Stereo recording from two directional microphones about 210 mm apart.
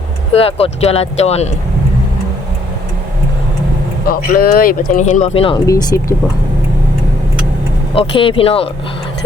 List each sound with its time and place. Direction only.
0.3 s speech: 30° left (ahead or behind)
4.1 s speech: 45° left (ahead or behind); by 5.5 s 25° left (ahead or behind)
5.6 s speech: 15° left (ahead or behind)
7.9 s speech: 25° left (ahead or behind)